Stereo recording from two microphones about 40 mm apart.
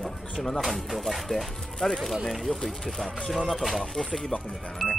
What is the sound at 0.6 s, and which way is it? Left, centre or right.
Speech, centre.